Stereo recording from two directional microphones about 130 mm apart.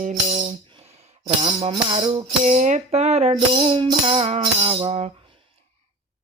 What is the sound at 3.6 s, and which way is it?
Music, 40° right (ahead or behind).